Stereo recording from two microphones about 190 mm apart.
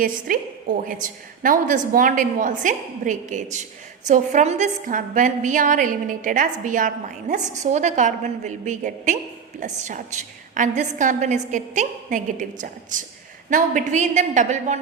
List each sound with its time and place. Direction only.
0.0 s a woman's voice: 45° right (ahead or behind)